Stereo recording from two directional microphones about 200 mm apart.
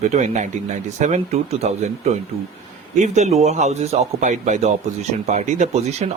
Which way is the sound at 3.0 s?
35° right (ahead or behind).